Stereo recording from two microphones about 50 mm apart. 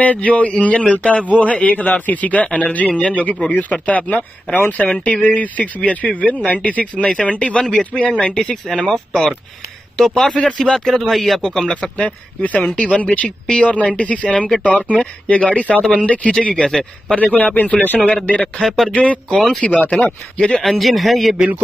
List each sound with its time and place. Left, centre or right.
0.0 s a man's voice: left; by 11.7 s centre
11.7 s a man's voice: left
18.6 s speech: centre
18.9 s a man's voice: left
20.6 s speech: centre
21.4 s a man's voice: right